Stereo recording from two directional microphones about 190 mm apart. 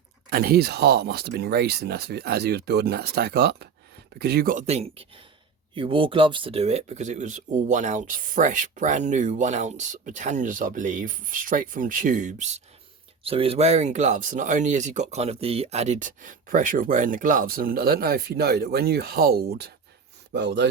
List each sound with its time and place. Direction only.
0.3 s speech: 50° right (ahead or behind)